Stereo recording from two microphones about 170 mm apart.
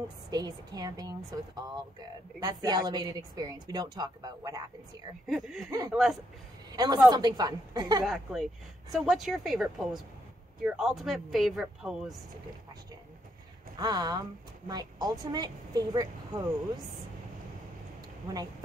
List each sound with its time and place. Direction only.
0.3 s a woman's voice: 25° right (ahead or behind)
5.2 s speech: centre (ahead or behind)
5.7 s a woman's voice: 20° right (ahead or behind)
8.0 s speech: centre (ahead or behind)
13.7 s a woman's voice: 25° right (ahead or behind)